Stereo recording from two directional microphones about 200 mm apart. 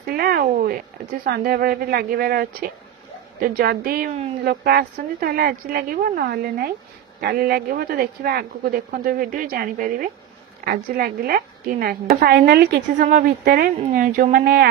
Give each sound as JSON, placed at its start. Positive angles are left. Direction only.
{"t": 0.0, "sound": "a woman's voice", "side_deg": -50}